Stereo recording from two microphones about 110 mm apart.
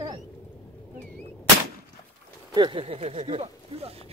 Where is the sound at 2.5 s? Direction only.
45° right (ahead or behind).